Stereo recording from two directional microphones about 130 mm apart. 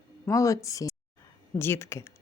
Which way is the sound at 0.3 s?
25° left (ahead or behind).